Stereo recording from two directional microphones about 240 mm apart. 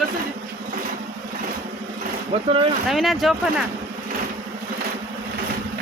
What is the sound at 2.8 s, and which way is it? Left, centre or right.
Speech, centre.